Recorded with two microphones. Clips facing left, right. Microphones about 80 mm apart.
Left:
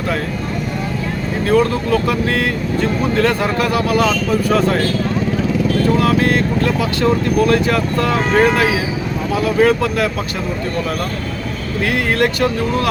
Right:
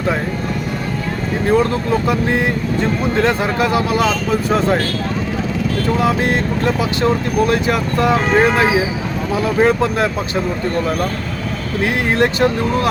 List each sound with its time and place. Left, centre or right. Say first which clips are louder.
1.5 s speech: left 1 dB; right
6.0 s speech: left 1 dB; right
11.8 s speech: even; right